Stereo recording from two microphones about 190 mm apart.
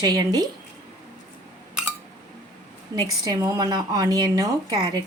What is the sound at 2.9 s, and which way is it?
A woman's voice, 20° right (ahead or behind).